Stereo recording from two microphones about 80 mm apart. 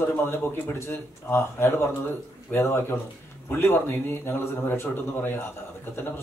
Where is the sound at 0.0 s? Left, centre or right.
Left.